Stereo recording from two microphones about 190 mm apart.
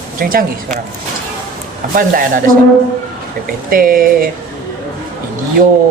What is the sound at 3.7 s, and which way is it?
Speech, 45° right (ahead or behind).